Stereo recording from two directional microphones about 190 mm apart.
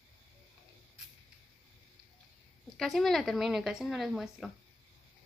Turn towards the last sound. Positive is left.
turn(degrees=0)  # may be behind; listen again after turning